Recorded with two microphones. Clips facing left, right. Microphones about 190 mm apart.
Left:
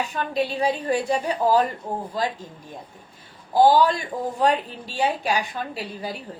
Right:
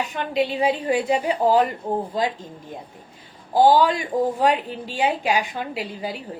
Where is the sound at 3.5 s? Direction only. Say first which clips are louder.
Right 1 dB; 15° right (ahead or behind).